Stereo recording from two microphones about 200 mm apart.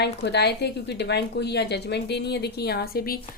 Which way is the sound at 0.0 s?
55° left (ahead or behind).